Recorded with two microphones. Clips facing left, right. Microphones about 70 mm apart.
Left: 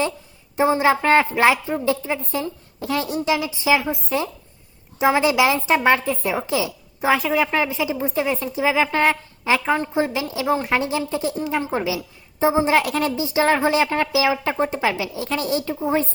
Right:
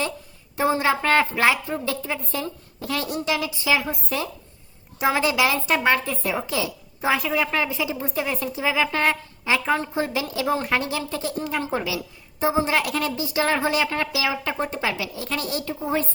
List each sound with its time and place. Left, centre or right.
0.5 s a woman's voice: centre
10.4 s speech: centre
10.7 s a woman's voice: left